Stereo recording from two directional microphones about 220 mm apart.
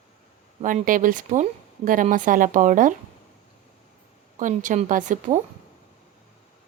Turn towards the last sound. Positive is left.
turn(degrees=-35)  # may be behind; listen again after turning